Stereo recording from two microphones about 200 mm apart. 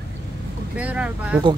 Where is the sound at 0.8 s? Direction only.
5° right (ahead or behind).